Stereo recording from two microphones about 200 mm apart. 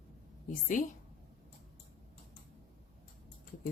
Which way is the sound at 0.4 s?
40° left (ahead or behind).